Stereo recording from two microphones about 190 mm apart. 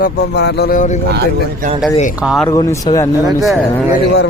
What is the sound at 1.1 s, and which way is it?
Speech, 55° right (ahead or behind).